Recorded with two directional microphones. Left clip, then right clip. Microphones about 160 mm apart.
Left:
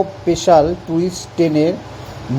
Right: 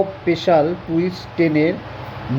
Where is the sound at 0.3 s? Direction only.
20° left (ahead or behind).